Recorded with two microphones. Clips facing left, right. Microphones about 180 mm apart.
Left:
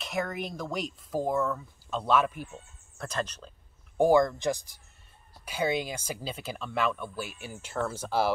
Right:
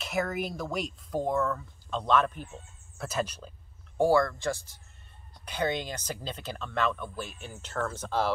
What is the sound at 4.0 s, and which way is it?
Speech, 20° left (ahead or behind).